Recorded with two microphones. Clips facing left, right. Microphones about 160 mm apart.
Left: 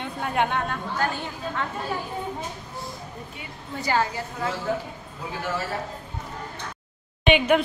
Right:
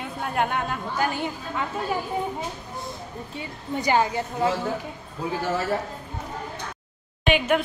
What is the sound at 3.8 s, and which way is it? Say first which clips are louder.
Speech: right 3 dB; 20° right (ahead or behind).